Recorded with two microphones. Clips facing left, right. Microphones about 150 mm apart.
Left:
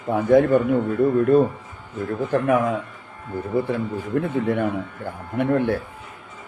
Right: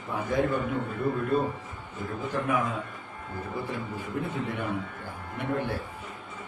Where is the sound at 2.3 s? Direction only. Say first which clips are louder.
Left 9 dB; 65° left (ahead or behind).